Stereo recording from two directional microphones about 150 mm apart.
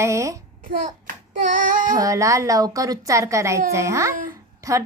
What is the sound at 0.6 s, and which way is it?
Child singing, 65° right (ahead or behind).